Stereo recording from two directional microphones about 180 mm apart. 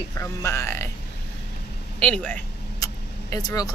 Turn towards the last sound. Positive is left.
turn(degrees=20)  # may be behind; listen again after turning